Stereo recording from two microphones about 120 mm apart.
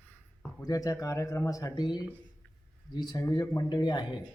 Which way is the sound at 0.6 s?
30° left (ahead or behind).